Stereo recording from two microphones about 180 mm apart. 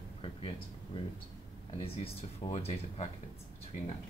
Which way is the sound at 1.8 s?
35° left (ahead or behind).